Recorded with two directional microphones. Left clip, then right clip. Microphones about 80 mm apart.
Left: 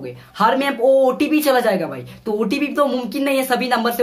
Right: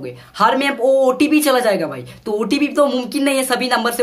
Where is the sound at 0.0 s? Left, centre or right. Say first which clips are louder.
Right 2 dB; right.